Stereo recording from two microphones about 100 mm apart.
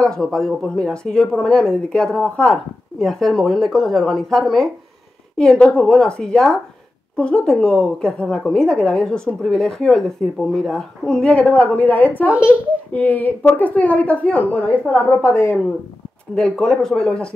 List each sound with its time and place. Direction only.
0.0 s a woman's voice: 5° left (ahead or behind)
12.3 s a child's voice: 15° right (ahead or behind)
12.9 s a woman's voice: 20° left (ahead or behind)
16.3 s a woman's voice: 5° left (ahead or behind)